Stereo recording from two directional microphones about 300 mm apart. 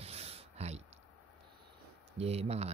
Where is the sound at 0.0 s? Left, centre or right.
Centre.